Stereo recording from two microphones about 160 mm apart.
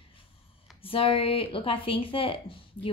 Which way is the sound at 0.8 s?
35° left (ahead or behind).